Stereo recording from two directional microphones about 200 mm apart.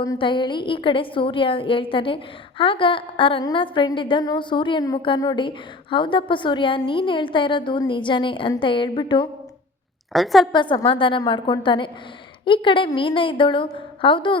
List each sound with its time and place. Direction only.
0.0 s a woman's voice: 20° left (ahead or behind)
10.1 s a woman's voice: centre (ahead or behind)
10.5 s a woman's voice: 25° left (ahead or behind)